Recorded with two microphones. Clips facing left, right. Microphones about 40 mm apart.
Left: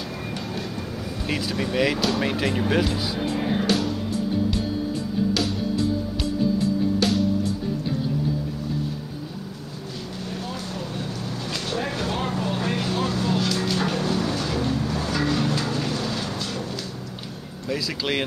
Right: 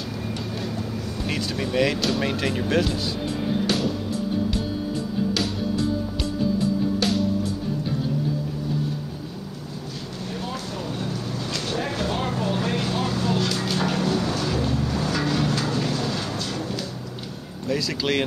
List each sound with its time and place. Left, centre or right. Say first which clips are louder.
0.3 s music: even; centre
1.2 s speech: left 1 dB; centre
3.2 s music: left 1 dB; left
3.6 s music: right 1 dB; centre
7.0 s music: left 1 dB; centre
10.5 s a sound: right 1 dB; centre